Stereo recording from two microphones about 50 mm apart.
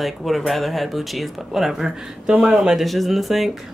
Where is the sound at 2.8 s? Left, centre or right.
Centre.